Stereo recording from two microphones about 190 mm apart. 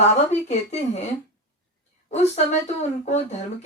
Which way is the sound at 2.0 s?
35° left (ahead or behind).